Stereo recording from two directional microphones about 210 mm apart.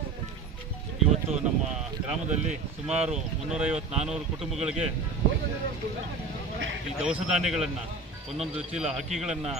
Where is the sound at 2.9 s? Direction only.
5° right (ahead or behind).